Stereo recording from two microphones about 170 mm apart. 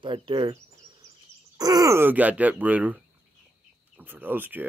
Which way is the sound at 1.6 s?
20° right (ahead or behind).